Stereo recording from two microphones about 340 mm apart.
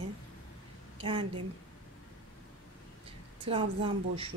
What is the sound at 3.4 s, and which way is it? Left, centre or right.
Speech, centre.